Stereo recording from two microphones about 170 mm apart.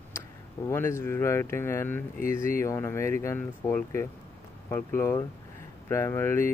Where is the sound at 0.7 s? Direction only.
15° left (ahead or behind).